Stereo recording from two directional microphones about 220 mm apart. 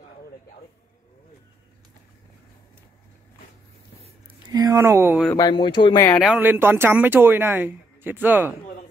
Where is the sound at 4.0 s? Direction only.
15° right (ahead or behind).